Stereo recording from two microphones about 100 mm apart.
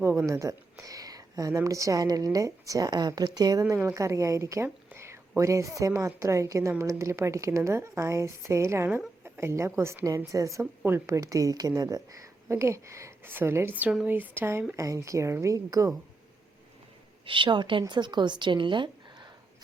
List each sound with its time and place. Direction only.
0.0 s a woman's voice: 20° right (ahead or behind)
0.3 s speech: 35° right (ahead or behind)
4.9 s a sound: 25° right (ahead or behind)
5.4 s a woman's voice: 30° right (ahead or behind)
17.2 s a woman's voice: 55° right (ahead or behind)